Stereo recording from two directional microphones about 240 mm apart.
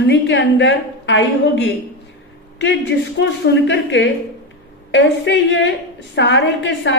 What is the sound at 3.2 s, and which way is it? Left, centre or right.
A woman's voice, left.